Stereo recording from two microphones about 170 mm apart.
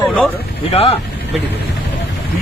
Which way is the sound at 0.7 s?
35° left (ahead or behind).